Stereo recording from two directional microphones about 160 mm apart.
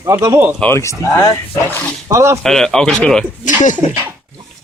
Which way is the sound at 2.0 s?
20° right (ahead or behind).